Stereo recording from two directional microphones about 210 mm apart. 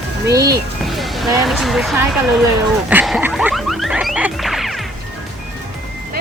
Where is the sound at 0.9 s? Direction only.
Centre (ahead or behind).